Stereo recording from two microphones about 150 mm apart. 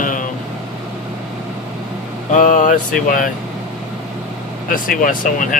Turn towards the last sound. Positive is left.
turn(degrees=65)  # may be behind; listen again after turning